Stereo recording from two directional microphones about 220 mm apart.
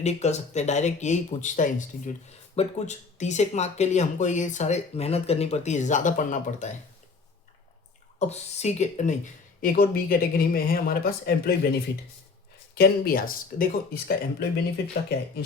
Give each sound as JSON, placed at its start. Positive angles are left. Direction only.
{"t": 0.0, "sound": "speech", "side_deg": 30}
{"t": 8.2, "sound": "speech", "side_deg": 30}
{"t": 12.7, "sound": "speech", "side_deg": 45}